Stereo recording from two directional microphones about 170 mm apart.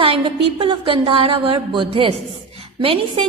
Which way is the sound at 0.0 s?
35° right (ahead or behind).